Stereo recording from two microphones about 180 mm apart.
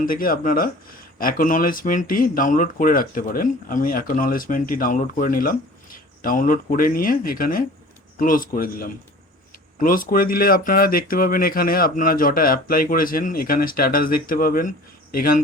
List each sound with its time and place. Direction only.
0.0 s speech: 50° left (ahead or behind)